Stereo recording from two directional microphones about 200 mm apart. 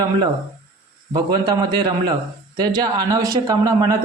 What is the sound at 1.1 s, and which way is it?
A man's voice, 20° right (ahead or behind).